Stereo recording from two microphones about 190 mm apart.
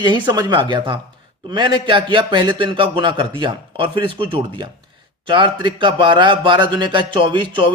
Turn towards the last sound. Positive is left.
turn(degrees=-25)  # may be behind; listen again after turning